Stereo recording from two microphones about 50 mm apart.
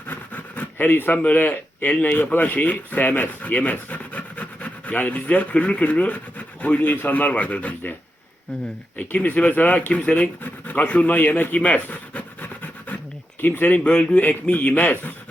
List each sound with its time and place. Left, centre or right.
0.1 s a sound: left
1.2 s speech: left
9.0 s speech: left